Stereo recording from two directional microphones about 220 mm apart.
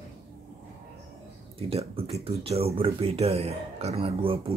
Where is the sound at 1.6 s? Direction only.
25° right (ahead or behind).